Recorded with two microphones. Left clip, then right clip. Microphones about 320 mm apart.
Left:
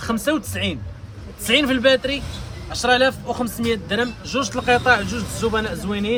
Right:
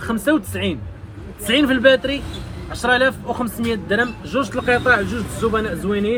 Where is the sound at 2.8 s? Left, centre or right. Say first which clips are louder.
Right 1 dB; centre.